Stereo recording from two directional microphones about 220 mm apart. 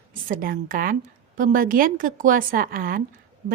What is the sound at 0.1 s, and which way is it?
A woman's voice, 40° right (ahead or behind).